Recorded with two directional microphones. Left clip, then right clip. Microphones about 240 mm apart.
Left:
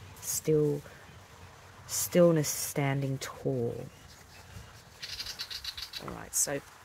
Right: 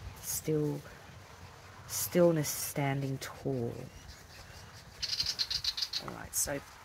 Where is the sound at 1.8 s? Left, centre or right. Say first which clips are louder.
Left 3 dB; left.